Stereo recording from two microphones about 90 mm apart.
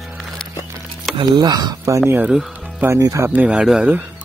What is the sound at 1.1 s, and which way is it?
Speech, 65° right (ahead or behind).